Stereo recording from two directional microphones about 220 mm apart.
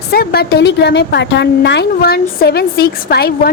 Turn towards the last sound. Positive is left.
turn(degrees=45)  # may be behind; listen again after turning